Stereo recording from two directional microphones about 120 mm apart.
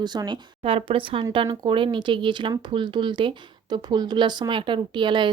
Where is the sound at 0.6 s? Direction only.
50° right (ahead or behind).